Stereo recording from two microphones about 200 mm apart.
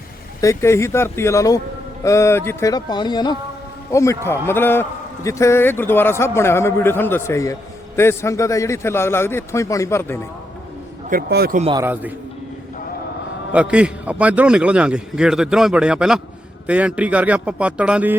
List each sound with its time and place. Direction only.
0.4 s a man's voice: 15° left (ahead or behind)
11.1 s speech: 50° right (ahead or behind)
11.7 s a man's voice: 10° right (ahead or behind)
13.5 s a man's voice: 5° right (ahead or behind)